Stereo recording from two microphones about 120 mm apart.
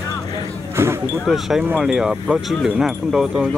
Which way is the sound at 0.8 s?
20° right (ahead or behind).